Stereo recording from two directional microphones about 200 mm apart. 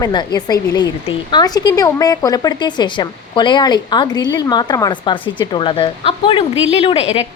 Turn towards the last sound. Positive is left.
turn(degrees=30)  # may be behind; listen again after turning